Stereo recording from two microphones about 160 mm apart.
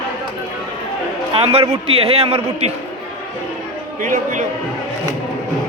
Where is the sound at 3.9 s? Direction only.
55° right (ahead or behind).